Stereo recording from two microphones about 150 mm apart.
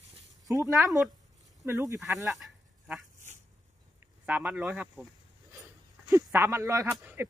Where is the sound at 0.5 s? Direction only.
20° right (ahead or behind).